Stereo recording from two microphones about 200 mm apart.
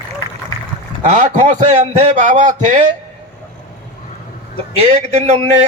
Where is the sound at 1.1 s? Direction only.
35° right (ahead or behind).